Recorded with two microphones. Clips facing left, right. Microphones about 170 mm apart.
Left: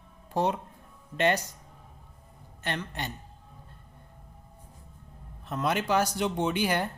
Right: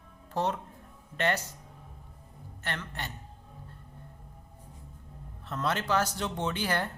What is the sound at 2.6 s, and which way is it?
Speech, 15° left (ahead or behind).